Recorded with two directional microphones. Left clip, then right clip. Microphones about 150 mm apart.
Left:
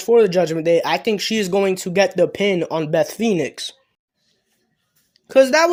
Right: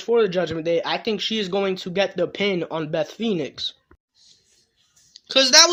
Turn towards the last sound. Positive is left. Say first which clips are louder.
# right 1 dB
turn(degrees=50)  # may be behind; listen again after turning